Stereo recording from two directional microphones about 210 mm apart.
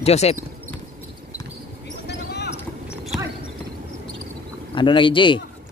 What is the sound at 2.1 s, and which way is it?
Clip-clop, 55° left (ahead or behind).